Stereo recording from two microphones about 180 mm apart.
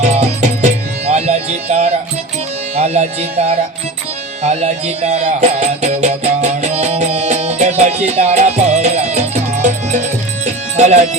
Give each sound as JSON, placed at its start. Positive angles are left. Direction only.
{"t": 0.0, "sound": "music", "side_deg": -35}